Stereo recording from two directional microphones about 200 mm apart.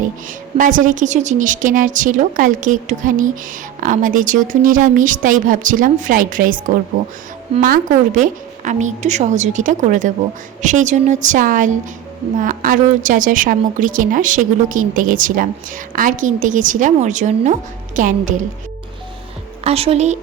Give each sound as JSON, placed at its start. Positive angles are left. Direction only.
{"t": 0.0, "sound": "a woman's voice", "side_deg": -40}
{"t": 19.6, "sound": "a woman's voice", "side_deg": -30}